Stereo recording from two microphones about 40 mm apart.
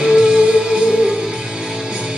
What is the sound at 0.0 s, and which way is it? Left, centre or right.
Music, right.